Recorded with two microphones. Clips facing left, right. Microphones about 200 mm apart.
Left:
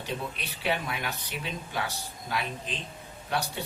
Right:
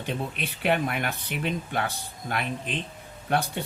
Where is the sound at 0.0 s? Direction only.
55° right (ahead or behind).